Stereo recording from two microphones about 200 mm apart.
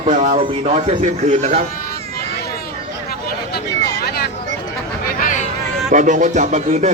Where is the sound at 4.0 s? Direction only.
50° left (ahead or behind).